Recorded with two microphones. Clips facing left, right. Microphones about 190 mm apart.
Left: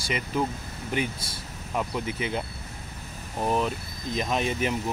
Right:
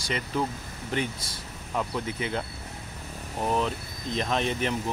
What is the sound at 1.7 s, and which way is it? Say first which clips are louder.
Speech: left 1 dB; 15° left (ahead or behind).